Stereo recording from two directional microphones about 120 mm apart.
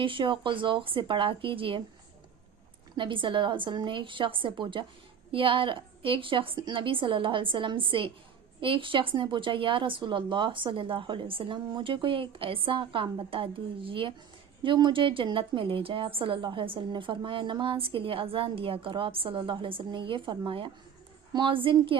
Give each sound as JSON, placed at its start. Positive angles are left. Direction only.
{"t": 0.0, "sound": "a woman's voice", "side_deg": -45}
{"t": 2.9, "sound": "a woman's voice", "side_deg": -45}